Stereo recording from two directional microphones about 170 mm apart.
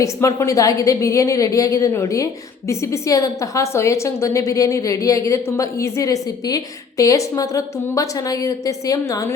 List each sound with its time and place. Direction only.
0.0 s a woman's voice: 15° left (ahead or behind)